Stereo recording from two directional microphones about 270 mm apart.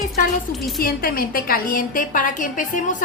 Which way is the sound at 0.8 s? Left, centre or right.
Left.